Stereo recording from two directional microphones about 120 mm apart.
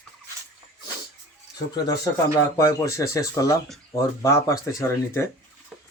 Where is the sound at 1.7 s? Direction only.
35° left (ahead or behind).